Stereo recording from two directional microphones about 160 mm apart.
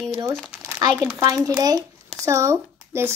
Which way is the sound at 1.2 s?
20° right (ahead or behind).